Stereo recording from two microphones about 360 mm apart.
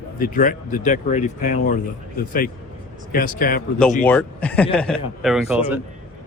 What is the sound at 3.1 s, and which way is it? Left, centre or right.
Speech, left.